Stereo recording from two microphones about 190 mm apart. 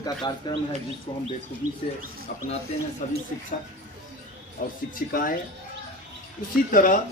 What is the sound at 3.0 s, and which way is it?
Speech, 45° left (ahead or behind).